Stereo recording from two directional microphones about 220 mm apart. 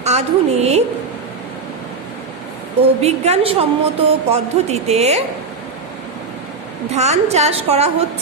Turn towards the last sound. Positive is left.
turn(degrees=-30)  # may be behind; listen again after turning